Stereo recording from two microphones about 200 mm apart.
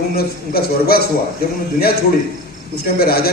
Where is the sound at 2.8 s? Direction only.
50° left (ahead or behind).